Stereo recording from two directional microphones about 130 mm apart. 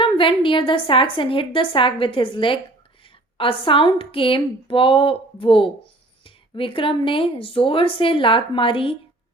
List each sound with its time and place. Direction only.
0.0 s a woman's voice: 40° left (ahead or behind)